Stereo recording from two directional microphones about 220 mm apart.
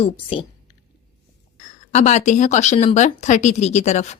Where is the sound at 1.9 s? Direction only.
30° left (ahead or behind).